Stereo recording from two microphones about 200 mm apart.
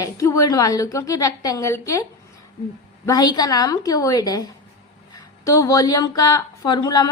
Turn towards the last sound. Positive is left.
turn(degrees=20)  # may be behind; listen again after turning